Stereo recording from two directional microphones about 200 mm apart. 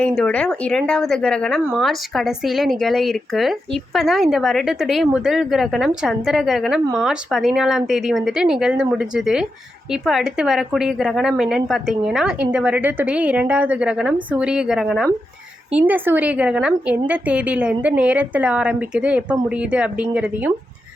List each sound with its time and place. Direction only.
0.0 s a woman's voice: 5° left (ahead or behind)